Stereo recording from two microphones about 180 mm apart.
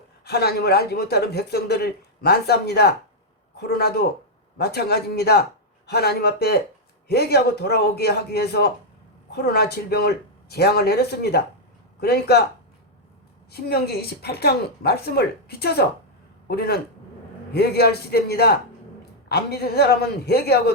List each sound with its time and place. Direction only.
0.3 s speech: 60° left (ahead or behind)
13.5 s speech: 60° left (ahead or behind)